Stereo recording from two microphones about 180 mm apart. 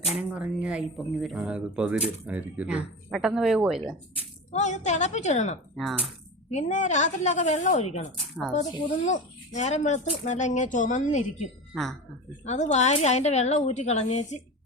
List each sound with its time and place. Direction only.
0.0 s speech: 5° right (ahead or behind)
4.5 s a woman's voice: 40° left (ahead or behind)
5.7 s speech: centre (ahead or behind)
6.5 s a woman's voice: 40° left (ahead or behind)
11.7 s speech: centre (ahead or behind)
12.5 s a woman's voice: 40° left (ahead or behind)